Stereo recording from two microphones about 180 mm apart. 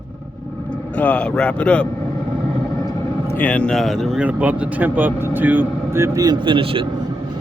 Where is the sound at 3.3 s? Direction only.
10° left (ahead or behind).